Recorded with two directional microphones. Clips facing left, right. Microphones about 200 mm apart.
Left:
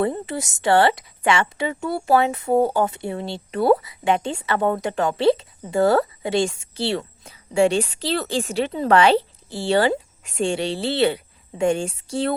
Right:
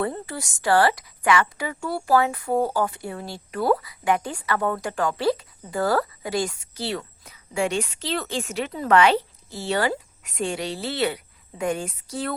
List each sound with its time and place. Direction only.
0.0 s a woman's voice: 20° left (ahead or behind)